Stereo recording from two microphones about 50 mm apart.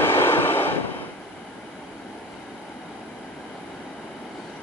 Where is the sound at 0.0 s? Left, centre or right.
Left.